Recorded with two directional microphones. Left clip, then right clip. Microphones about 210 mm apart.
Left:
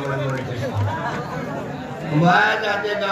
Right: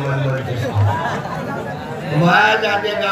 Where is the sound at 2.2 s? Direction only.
25° left (ahead or behind).